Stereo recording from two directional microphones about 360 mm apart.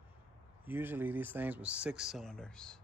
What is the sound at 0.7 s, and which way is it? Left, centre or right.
Speech, centre.